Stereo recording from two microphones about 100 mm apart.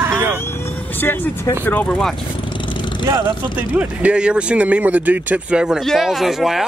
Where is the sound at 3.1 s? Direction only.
50° right (ahead or behind).